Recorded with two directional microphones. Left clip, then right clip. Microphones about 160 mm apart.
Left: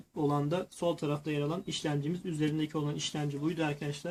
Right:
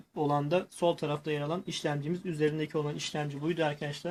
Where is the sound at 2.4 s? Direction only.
25° right (ahead or behind).